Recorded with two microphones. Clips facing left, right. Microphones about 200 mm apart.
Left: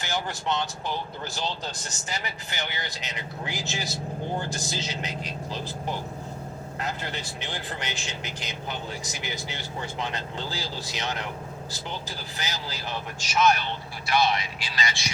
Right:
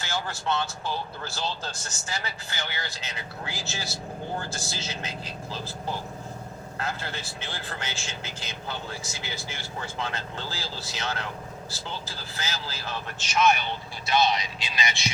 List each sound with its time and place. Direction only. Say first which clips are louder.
0.0 s speech: left 1 dB; 15° left (ahead or behind)
14.1 s speech: even; 20° right (ahead or behind)